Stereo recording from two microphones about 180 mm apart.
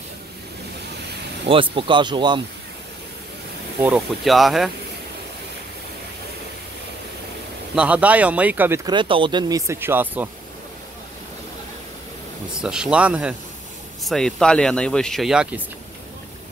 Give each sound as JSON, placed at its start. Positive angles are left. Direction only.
{"t": 1.5, "sound": "speech", "side_deg": -30}
{"t": 3.8, "sound": "speech", "side_deg": -5}
{"t": 7.7, "sound": "speech", "side_deg": -5}
{"t": 8.9, "sound": "speech", "side_deg": -30}
{"t": 12.6, "sound": "speech", "side_deg": -5}